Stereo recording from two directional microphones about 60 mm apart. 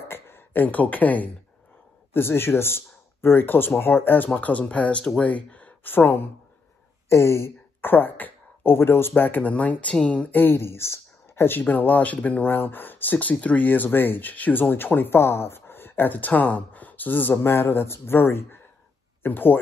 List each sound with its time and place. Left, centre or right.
0.1 s speech: left
2.1 s speech: left
7.1 s speech: left
7.8 s speech: left
10.4 s speech: left
11.6 s speech: left